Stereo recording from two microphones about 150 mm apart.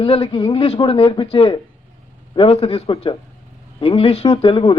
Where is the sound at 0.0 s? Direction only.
40° left (ahead or behind).